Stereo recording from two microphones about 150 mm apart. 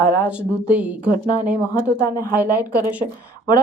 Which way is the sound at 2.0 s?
25° left (ahead or behind).